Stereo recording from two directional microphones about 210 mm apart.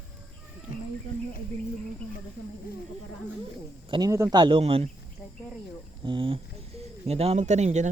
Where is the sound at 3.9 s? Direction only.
20° right (ahead or behind).